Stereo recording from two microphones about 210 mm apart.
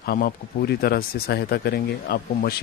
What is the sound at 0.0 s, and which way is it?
Speech, 45° left (ahead or behind).